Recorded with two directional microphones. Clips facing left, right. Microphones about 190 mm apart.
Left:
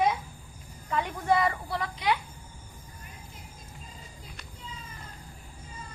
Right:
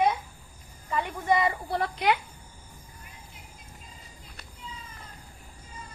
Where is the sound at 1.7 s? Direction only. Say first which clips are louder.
Right 4 dB; 60° right (ahead or behind).